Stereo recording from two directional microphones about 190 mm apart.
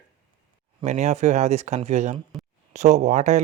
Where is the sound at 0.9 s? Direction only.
40° right (ahead or behind).